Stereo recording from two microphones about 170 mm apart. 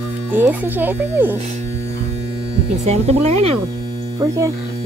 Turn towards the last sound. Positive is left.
turn(degrees=-15)  # may be behind; listen again after turning